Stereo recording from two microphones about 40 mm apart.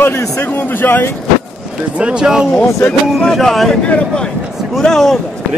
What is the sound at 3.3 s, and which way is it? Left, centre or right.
Speech, centre.